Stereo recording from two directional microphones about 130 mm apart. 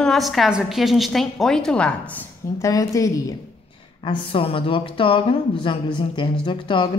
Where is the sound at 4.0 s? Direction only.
40° left (ahead or behind).